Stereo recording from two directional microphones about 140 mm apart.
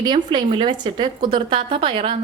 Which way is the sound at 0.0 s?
30° right (ahead or behind).